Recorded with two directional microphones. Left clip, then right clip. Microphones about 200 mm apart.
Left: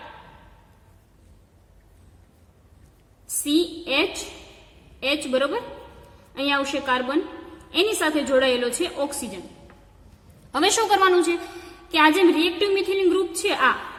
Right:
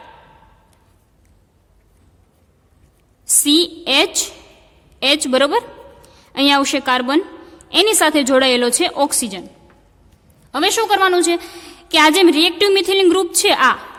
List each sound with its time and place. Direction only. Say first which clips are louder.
3.4 s a woman's voice: right 7 dB; 50° right (ahead or behind)
10.5 s a woman's voice: right 4 dB; 30° right (ahead or behind); by 13.7 s 55° right (ahead or behind)